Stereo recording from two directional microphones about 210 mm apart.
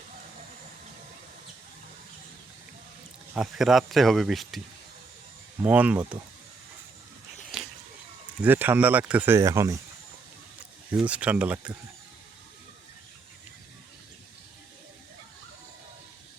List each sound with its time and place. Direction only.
3.3 s speech: centre (ahead or behind)
5.6 s speech: 5° right (ahead or behind)
7.5 s a sound: centre (ahead or behind)
8.4 s speech: 10° right (ahead or behind)
10.9 s speech: 5° right (ahead or behind)